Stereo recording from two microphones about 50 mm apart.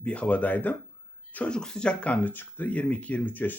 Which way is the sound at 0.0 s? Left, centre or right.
Left.